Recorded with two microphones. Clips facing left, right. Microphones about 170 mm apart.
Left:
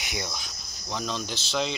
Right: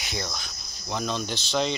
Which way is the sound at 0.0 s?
15° left (ahead or behind).